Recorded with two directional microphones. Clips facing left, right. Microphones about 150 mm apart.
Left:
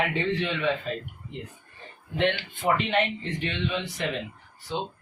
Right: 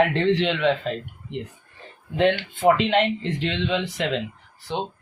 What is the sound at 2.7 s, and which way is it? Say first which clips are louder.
Speech: right 5 dB; 90° right.